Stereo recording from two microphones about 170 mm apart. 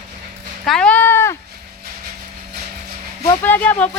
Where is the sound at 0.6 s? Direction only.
5° left (ahead or behind).